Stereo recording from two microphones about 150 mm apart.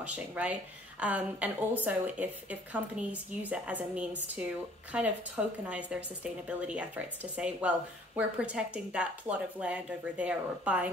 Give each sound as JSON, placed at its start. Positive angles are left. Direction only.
{"t": 0.0, "sound": "a woman's voice", "side_deg": -10}